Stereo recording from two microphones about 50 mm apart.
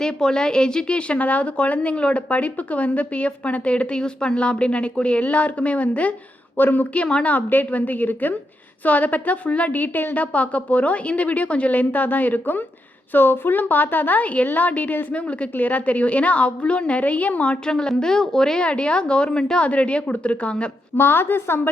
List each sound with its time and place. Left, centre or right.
0.0 s a woman's voice: centre; by 6.1 s left
6.6 s a woman's voice: left
6.9 s a woman's voice: left
7.3 s a woman's voice: left
10.2 s a woman's voice: left
17.7 s a woman's voice: centre
18.6 s a woman's voice: left
20.9 s a woman's voice: left